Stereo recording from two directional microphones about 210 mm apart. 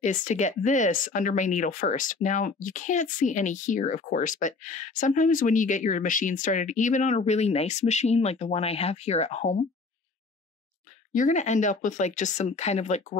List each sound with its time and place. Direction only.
0.0 s speech: 35° left (ahead or behind)
11.1 s speech: 35° left (ahead or behind)